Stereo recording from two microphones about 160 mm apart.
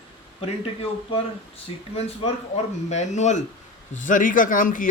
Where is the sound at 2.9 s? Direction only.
45° left (ahead or behind).